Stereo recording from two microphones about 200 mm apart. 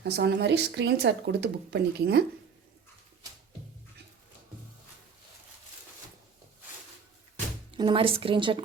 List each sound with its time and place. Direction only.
0.0 s speech: 55° right (ahead or behind)
7.8 s speech: 25° right (ahead or behind)